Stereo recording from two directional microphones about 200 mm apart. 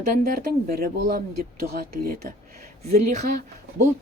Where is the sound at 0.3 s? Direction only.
50° right (ahead or behind).